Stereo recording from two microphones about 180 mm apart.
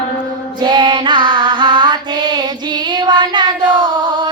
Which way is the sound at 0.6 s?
25° right (ahead or behind).